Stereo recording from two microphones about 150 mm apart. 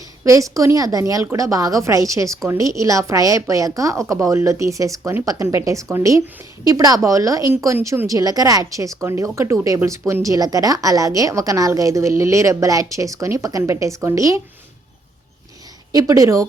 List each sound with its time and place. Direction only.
0.3 s a woman's voice: 20° right (ahead or behind)
15.9 s a woman's voice: 25° right (ahead or behind)